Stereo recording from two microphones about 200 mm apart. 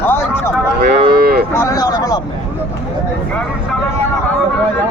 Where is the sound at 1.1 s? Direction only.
50° right (ahead or behind).